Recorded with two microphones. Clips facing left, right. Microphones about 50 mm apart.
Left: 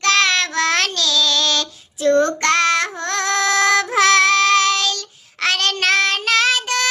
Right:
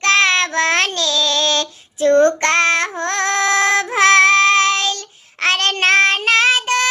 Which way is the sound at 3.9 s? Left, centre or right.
Right.